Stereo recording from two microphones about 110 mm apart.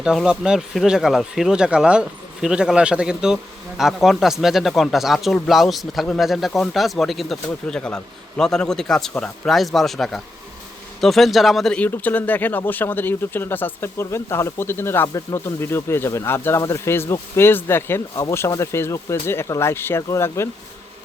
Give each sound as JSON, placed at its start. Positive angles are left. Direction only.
{"t": 0.0, "sound": "speech", "side_deg": -5}